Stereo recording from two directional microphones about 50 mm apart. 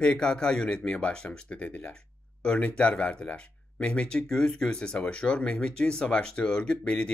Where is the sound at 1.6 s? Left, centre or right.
Left.